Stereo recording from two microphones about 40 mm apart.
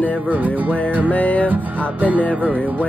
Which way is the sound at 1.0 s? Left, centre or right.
Left.